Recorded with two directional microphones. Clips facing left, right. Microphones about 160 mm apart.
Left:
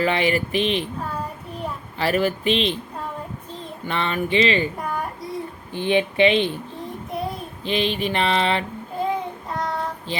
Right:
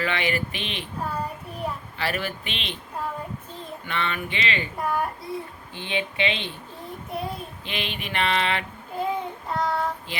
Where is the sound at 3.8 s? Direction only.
35° left (ahead or behind).